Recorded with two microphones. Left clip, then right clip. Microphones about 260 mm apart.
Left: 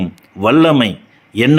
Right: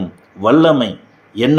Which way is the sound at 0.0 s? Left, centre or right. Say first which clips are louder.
Left 1 dB; left.